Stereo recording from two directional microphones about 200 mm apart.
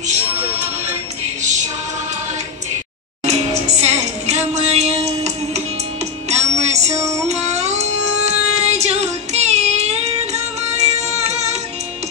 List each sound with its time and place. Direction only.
3.3 s music: 35° right (ahead or behind)